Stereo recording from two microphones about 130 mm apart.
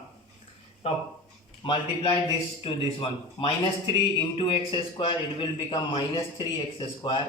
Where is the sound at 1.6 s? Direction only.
45° left (ahead or behind).